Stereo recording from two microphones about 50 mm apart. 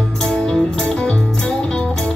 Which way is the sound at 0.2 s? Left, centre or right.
Centre.